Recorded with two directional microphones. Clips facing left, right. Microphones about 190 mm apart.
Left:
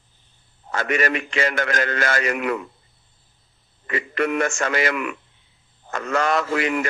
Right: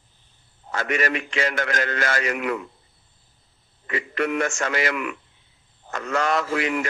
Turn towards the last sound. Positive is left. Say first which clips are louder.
# left 2 dB
turn(degrees=55)  # may be behind; listen again after turning